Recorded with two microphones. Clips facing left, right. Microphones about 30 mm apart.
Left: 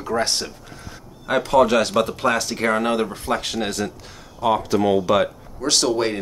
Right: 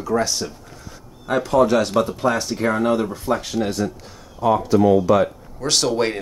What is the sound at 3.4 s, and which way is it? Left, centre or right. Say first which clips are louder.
A man's voice: right 2 dB; left.